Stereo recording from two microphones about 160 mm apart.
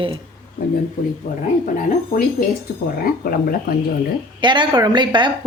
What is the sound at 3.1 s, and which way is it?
Speech, 65° left (ahead or behind).